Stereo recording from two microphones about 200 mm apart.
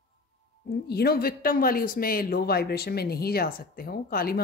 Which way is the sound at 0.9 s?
50° left (ahead or behind).